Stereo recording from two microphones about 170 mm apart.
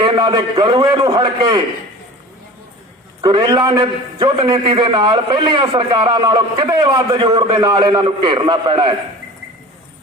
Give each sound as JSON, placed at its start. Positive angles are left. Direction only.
{"t": 0.0, "sound": "a man's voice", "side_deg": -30}
{"t": 3.2, "sound": "a man's voice", "side_deg": -25}